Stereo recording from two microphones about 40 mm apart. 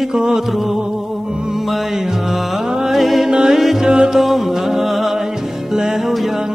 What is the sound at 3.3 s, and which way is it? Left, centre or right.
Music, centre.